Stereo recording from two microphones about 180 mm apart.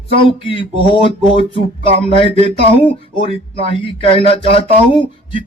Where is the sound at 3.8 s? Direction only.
30° left (ahead or behind).